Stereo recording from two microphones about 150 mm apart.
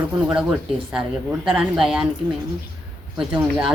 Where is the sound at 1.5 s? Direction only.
5° right (ahead or behind).